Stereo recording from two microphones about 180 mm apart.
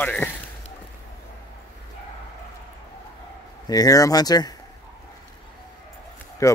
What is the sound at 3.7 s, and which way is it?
Speech, 20° left (ahead or behind).